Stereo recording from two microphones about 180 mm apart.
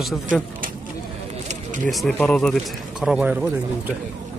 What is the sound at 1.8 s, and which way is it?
A man's voice, centre (ahead or behind).